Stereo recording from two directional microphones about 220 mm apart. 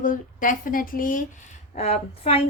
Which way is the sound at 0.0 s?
35° left (ahead or behind).